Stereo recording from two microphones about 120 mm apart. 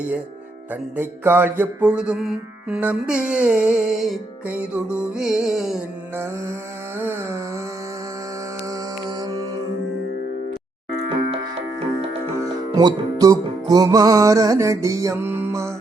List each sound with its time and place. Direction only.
0.7 s mantra: 20° right (ahead or behind)
4.4 s music: 10° right (ahead or behind)
7.0 s a sound: 20° right (ahead or behind)
8.7 s music: 35° right (ahead or behind)
12.7 s music: 30° right (ahead or behind)